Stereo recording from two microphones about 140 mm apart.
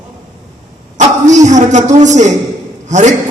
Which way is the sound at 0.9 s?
60° right (ahead or behind).